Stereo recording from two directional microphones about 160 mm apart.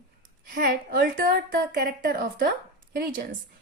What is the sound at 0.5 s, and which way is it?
A woman's voice, 60° right (ahead or behind).